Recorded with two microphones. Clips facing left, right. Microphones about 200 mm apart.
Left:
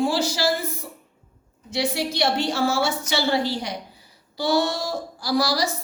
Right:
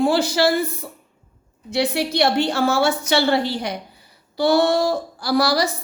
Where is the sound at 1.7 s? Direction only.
60° right (ahead or behind).